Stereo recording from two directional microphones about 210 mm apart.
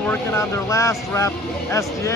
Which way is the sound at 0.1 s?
15° left (ahead or behind).